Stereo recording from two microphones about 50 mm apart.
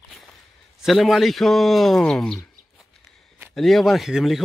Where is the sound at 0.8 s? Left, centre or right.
Centre.